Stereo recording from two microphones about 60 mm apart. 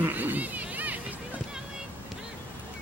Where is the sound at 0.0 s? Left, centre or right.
Right.